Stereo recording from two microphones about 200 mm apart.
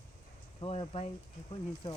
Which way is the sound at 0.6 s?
30° left (ahead or behind).